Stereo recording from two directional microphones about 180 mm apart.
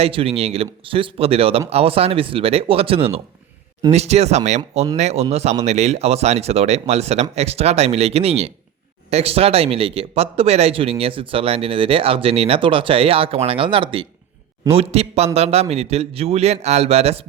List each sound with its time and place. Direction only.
0.0 s speech: 30° right (ahead or behind)